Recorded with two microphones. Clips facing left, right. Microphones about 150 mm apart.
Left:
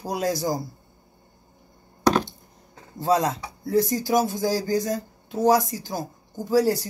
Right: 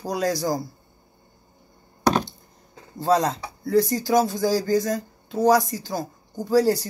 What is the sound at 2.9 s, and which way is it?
Speech, 15° left (ahead or behind).